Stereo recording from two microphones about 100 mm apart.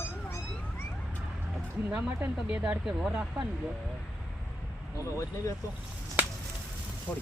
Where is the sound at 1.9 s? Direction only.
15° right (ahead or behind).